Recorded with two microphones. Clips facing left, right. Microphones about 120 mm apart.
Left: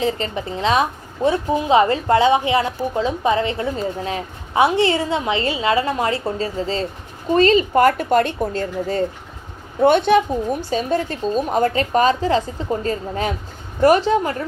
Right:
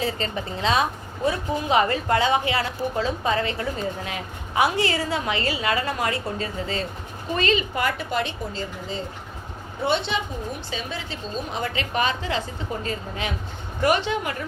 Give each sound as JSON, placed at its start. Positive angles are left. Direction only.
{"t": 0.0, "sound": "a woman's voice", "side_deg": 25}